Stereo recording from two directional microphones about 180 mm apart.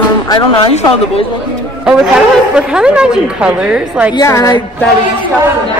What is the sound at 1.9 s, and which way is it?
A woman's voice, 5° right (ahead or behind).